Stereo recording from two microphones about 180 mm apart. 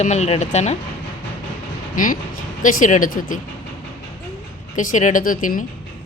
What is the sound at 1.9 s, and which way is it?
Speech, 50° left (ahead or behind).